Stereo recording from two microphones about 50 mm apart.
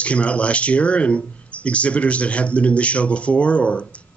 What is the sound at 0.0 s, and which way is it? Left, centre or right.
Speech, left.